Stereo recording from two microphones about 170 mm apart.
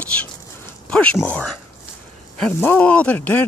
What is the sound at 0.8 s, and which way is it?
Speech, 5° left (ahead or behind).